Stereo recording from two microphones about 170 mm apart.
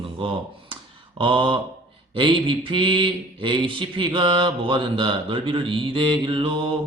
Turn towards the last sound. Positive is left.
turn(degrees=-30)  # may be behind; listen again after turning